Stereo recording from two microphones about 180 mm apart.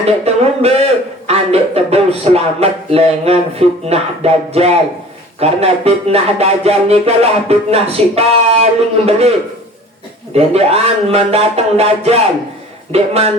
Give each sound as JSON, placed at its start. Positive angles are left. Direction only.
{"t": 0.0, "sound": "a man's voice", "side_deg": -35}
{"t": 10.3, "sound": "speech", "side_deg": -35}